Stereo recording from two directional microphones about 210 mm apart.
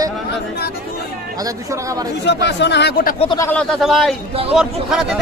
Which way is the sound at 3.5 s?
5° left (ahead or behind).